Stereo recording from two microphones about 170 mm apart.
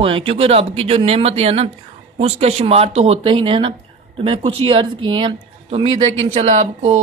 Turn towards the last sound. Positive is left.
turn(degrees=-40)  # may be behind; listen again after turning